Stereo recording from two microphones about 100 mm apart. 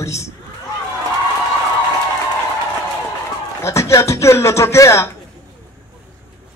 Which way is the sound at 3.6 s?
30° left (ahead or behind).